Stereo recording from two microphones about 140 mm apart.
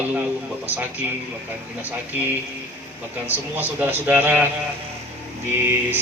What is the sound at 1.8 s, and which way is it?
Speech, 15° right (ahead or behind).